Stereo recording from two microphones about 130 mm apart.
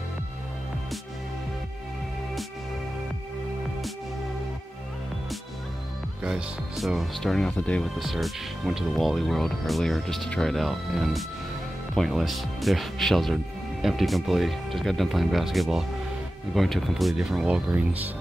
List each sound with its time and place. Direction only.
6.2 s speech: 5° right (ahead or behind)